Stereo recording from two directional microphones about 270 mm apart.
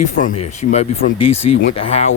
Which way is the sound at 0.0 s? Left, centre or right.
Left.